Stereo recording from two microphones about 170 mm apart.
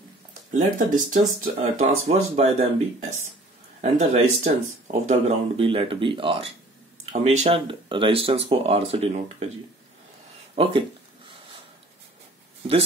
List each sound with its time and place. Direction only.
0.5 s speech: 50° right (ahead or behind)
10.5 s speech: 35° right (ahead or behind)
11.2 s a sound: 30° right (ahead or behind)